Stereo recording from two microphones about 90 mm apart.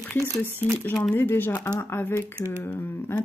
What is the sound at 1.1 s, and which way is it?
Speech, 20° left (ahead or behind).